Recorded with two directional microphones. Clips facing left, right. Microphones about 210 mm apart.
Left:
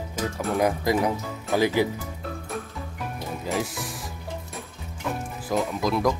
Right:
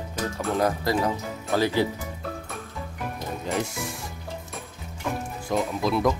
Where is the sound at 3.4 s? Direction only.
Centre (ahead or behind).